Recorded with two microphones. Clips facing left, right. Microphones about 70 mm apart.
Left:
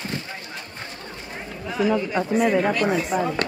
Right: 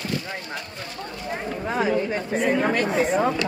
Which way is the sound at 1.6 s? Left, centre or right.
Right.